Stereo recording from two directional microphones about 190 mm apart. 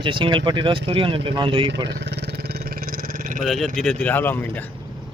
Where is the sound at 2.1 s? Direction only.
60° right (ahead or behind).